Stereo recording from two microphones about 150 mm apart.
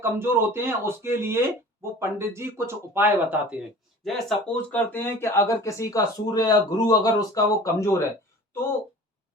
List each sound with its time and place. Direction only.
0.0 s speech: 15° right (ahead or behind)
4.0 s speech: centre (ahead or behind); by 8.0 s 20° left (ahead or behind)